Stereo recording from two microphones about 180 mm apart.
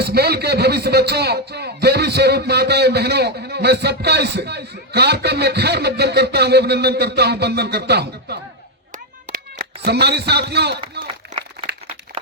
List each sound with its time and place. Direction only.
0.0 s a man's voice: 60° right (ahead or behind)
9.2 s a man's voice: 50° right (ahead or behind)